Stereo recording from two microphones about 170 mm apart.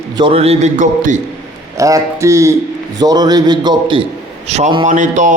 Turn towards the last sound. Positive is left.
turn(degrees=-45)  # may be behind; listen again after turning